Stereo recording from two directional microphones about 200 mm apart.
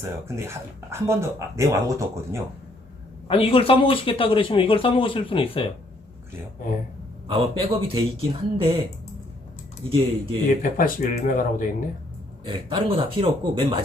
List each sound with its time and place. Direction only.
0.0 s speech: 15° right (ahead or behind)
3.2 s speech: 25° left (ahead or behind)
7.3 s speech: 25° right (ahead or behind)
9.9 s speech: 25° right (ahead or behind)
10.5 s speech: 45° left (ahead or behind)
12.5 s speech: 25° right (ahead or behind)